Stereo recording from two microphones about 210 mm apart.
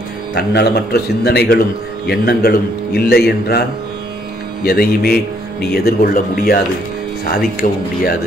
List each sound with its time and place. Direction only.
0.3 s speech: 50° left (ahead or behind)
4.6 s speech: 45° left (ahead or behind)
7.6 s speech: 35° left (ahead or behind)